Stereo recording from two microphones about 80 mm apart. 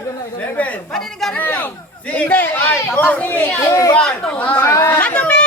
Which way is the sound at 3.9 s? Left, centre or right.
Centre.